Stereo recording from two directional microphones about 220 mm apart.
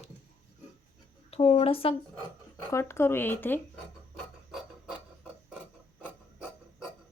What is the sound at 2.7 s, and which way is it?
Speech, 10° left (ahead or behind).